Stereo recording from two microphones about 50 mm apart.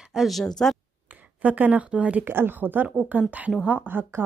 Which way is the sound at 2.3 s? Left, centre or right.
Right.